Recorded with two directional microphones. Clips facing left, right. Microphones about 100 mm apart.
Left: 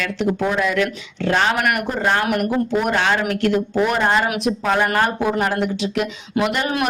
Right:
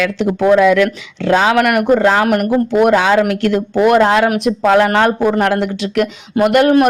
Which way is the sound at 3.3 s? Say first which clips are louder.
Right 3 dB; 80° right.